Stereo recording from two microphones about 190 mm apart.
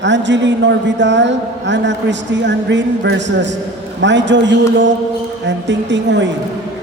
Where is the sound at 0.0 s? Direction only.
70° right (ahead or behind).